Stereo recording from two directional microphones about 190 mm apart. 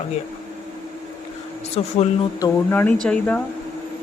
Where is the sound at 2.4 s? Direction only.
10° left (ahead or behind).